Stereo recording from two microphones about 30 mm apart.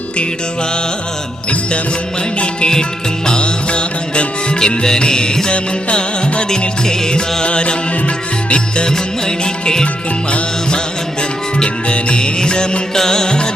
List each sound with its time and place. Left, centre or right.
3.2 s music: left
4.6 s music: left
5.5 s music: left
6.8 s music: left
7.4 s music: left
9.2 s music: left
11.6 s music: left